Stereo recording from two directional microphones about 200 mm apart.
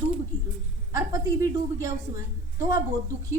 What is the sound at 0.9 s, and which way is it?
Speech, 15° right (ahead or behind).